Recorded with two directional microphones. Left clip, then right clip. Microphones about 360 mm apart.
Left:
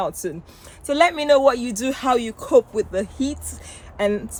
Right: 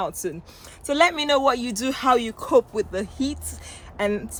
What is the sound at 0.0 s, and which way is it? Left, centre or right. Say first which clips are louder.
Speech: left 2 dB; centre.